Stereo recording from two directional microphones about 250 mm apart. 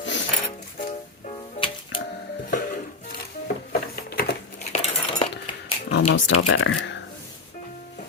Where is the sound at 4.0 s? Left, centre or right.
Left.